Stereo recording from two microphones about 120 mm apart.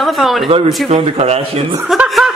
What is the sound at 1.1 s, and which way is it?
Speech, 60° right (ahead or behind).